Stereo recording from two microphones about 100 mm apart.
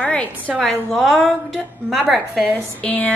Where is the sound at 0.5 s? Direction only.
Centre (ahead or behind).